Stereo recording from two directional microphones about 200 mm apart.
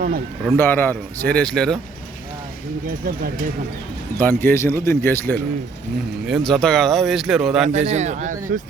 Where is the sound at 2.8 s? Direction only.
45° right (ahead or behind).